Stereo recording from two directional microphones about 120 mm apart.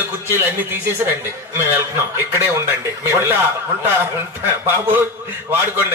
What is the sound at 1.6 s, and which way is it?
A man's voice, 20° right (ahead or behind).